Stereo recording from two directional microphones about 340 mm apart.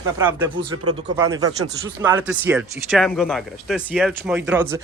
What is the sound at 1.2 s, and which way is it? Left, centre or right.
Speech, centre.